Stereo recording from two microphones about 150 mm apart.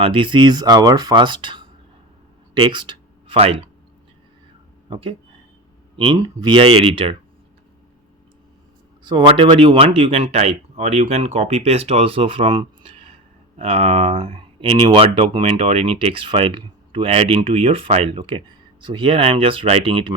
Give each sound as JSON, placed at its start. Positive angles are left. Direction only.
{"t": 0.0, "sound": "speech", "side_deg": -35}
{"t": 4.9, "sound": "speech", "side_deg": -35}
{"t": 6.1, "sound": "speech", "side_deg": -25}
{"t": 9.0, "sound": "speech", "side_deg": -30}